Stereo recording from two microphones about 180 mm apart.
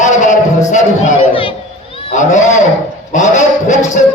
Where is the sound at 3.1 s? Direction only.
40° left (ahead or behind).